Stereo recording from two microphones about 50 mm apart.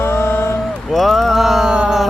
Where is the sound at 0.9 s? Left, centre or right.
Centre.